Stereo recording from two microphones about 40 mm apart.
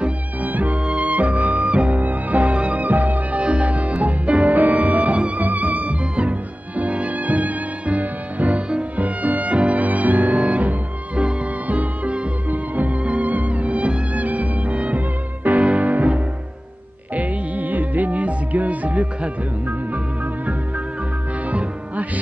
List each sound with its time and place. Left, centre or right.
0.4 s music: right
8.9 s music: right
15.0 s music: right
21.5 s music: right